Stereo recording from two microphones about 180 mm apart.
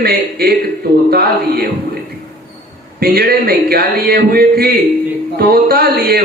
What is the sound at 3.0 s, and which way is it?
A man's voice, 60° right (ahead or behind).